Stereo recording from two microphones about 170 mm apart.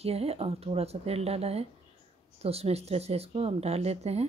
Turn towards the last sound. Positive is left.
turn(degrees=-40)  # may be behind; listen again after turning